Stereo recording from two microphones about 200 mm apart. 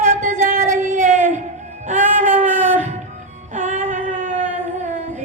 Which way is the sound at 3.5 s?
40° right (ahead or behind).